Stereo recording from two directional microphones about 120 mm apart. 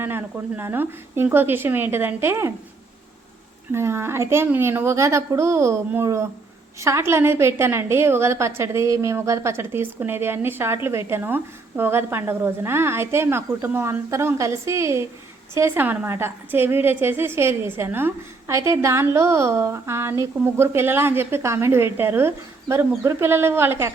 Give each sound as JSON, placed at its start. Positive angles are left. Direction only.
{"t": 0.0, "sound": "a woman's voice", "side_deg": -20}
{"t": 3.7, "sound": "a woman's voice", "side_deg": -20}